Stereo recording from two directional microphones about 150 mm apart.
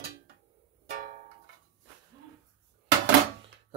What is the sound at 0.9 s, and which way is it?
Music, 70° right (ahead or behind).